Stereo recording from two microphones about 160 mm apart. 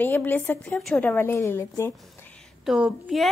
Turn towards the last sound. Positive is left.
turn(degrees=0)  # may be behind; listen again after turning